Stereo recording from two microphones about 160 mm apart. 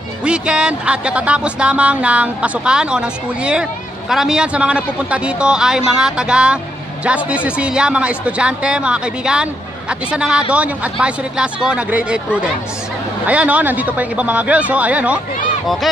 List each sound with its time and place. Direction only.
0.2 s a man's voice: 5° right (ahead or behind)